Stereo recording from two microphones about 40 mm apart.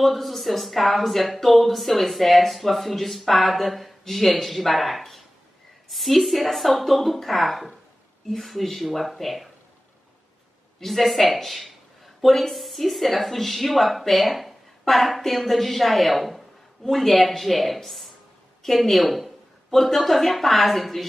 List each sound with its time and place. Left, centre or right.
0.0 s speech: centre
10.8 s a woman's voice: centre